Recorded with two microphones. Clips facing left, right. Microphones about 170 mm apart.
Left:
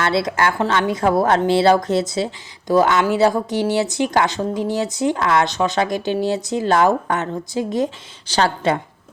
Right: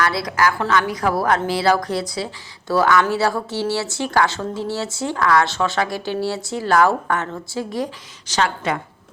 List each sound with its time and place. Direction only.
0.0 s speech: 25° left (ahead or behind)
8.3 s a woman's voice: 30° left (ahead or behind)